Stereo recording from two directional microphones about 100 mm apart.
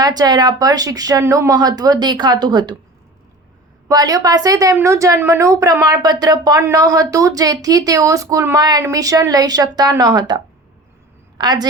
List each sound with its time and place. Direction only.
0.0 s a woman's voice: 40° right (ahead or behind)
3.8 s a woman's voice: 40° right (ahead or behind)